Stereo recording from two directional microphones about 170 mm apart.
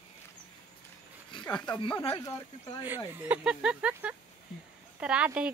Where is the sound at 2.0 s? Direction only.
25° left (ahead or behind).